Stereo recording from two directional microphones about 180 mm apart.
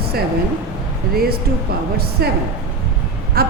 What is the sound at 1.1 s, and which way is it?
Speech, 55° right (ahead or behind).